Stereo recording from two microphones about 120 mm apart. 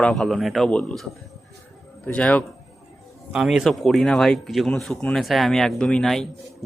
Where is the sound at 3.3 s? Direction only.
Centre (ahead or behind).